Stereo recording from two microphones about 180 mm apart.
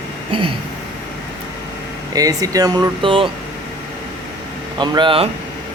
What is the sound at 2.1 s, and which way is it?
Speech, 20° right (ahead or behind).